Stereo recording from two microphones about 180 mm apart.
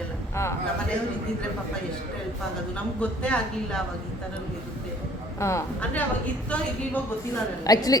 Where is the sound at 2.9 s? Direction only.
5° left (ahead or behind).